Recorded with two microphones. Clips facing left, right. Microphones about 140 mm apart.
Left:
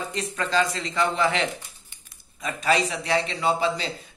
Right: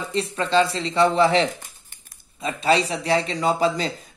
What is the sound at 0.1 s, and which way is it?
A man's voice, 30° right (ahead or behind).